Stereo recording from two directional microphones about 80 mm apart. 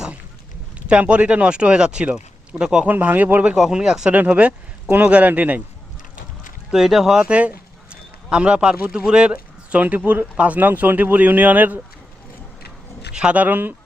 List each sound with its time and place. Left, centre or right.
0.9 s speech: centre
2.9 s speech: right
3.5 s speech: centre
4.1 s speech: centre
6.7 s speech: centre; by 11.8 s right
13.1 s speech: centre